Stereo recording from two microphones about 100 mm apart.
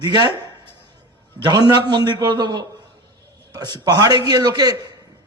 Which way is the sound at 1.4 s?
45° right (ahead or behind).